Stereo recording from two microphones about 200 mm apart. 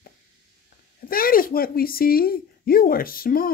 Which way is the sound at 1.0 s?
45° left (ahead or behind).